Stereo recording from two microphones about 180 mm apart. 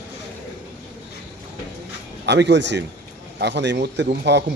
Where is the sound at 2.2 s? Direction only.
75° right (ahead or behind).